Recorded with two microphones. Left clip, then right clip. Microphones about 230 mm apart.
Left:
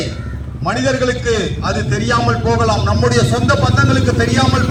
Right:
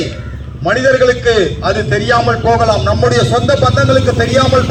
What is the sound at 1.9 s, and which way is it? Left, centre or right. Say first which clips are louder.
Speech: right 4 dB; centre.